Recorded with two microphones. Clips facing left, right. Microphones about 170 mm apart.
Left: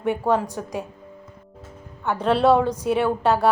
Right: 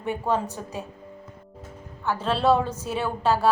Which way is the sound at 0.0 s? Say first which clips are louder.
Left 4 dB; 15° left (ahead or behind).